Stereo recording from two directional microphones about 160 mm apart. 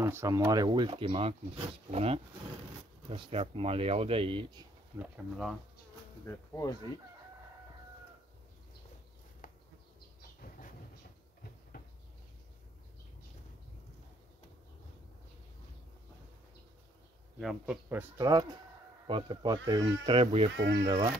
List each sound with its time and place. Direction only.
0.0 s speech: 20° right (ahead or behind)
4.9 s speech: 10° right (ahead or behind)
6.2 s speech: 20° left (ahead or behind)
9.4 s bee: 55° left (ahead or behind)
17.4 s speech: centre (ahead or behind)
17.8 s speech: 15° right (ahead or behind)